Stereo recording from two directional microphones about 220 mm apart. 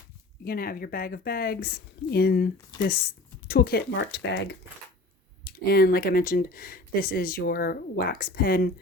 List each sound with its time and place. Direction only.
0.4 s speech: 40° left (ahead or behind)